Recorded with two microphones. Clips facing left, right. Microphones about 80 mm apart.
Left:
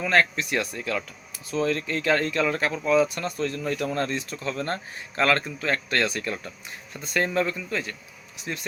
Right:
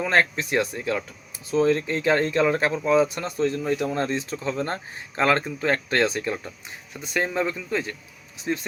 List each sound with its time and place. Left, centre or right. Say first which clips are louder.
0.0 s speech: right 1 dB; right